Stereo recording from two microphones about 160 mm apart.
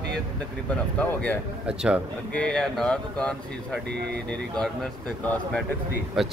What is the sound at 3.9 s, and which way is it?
Speech, 90° right.